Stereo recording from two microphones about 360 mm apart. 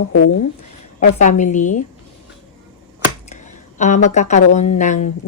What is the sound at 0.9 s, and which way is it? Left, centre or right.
Speech, centre.